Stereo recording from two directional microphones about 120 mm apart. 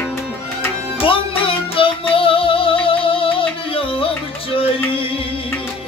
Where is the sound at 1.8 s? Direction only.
50° left (ahead or behind).